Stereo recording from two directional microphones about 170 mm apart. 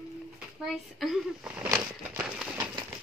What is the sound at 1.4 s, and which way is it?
Speech, 10° right (ahead or behind).